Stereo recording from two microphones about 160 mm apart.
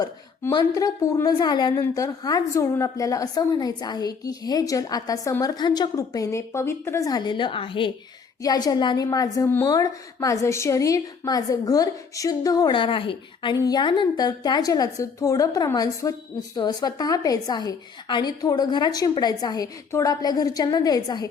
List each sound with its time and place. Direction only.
0.0 s a woman's voice: 25° left (ahead or behind)